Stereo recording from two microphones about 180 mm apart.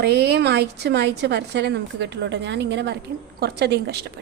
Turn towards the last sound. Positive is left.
turn(degrees=-65)  # may be behind; listen again after turning